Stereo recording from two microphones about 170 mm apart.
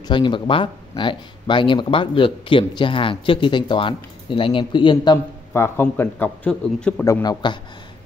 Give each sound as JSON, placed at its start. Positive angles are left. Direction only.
{"t": 0.1, "sound": "a man's voice", "side_deg": 30}